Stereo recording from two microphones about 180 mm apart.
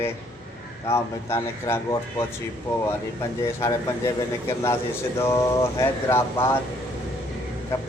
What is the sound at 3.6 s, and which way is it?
Speech, 15° left (ahead or behind).